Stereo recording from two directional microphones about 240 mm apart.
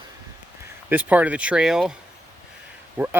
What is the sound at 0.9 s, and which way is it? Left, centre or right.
Speech, centre.